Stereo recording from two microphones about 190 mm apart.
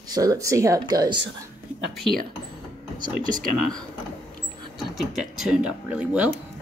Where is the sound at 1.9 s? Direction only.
Centre (ahead or behind).